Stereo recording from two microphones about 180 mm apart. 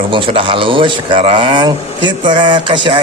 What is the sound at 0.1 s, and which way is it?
Speech, 30° right (ahead or behind).